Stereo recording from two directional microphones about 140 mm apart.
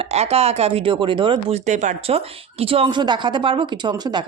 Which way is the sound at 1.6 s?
60° right (ahead or behind).